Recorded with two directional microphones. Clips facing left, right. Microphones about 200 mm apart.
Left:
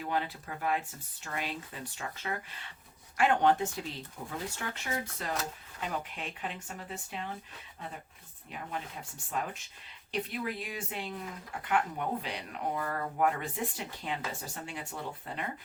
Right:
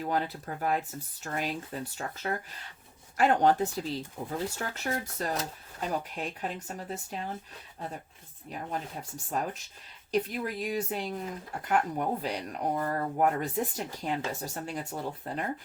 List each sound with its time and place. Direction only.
0.0 s speech: 40° right (ahead or behind)
9.3 s speech: 40° right (ahead or behind)